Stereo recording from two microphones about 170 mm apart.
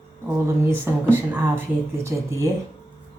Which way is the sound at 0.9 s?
15° right (ahead or behind).